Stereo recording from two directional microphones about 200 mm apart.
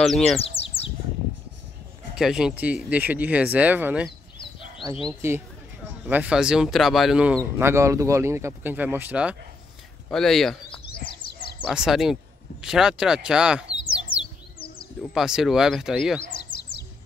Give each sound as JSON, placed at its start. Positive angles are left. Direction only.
{"t": 0.0, "sound": "speech", "side_deg": 0}
{"t": 0.4, "sound": "bird", "side_deg": 30}
{"t": 2.1, "sound": "speech", "side_deg": -5}
{"t": 5.2, "sound": "speech", "side_deg": -10}
{"t": 11.7, "sound": "speech", "side_deg": 0}
{"t": 15.1, "sound": "speech", "side_deg": 0}